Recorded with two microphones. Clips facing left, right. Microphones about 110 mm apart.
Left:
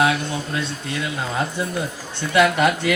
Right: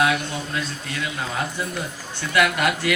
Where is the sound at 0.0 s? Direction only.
30° left (ahead or behind).